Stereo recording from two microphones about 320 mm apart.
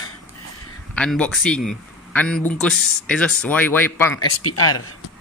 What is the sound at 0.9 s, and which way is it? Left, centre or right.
Speech, centre.